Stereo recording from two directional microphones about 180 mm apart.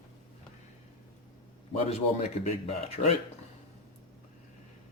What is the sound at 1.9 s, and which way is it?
Speech, 40° left (ahead or behind).